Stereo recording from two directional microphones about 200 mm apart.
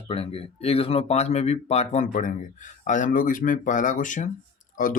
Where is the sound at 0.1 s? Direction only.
30° left (ahead or behind).